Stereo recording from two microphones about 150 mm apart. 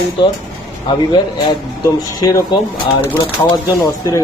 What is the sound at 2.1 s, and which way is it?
Speech, 25° left (ahead or behind).